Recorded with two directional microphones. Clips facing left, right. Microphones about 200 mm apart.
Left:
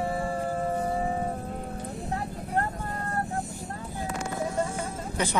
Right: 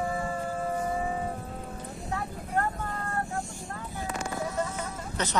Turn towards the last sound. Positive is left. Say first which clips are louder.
# left 3 dB
turn(degrees=10)  # may be behind; listen again after turning